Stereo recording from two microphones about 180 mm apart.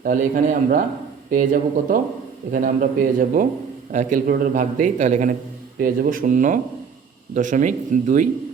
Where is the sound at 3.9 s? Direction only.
45° right (ahead or behind).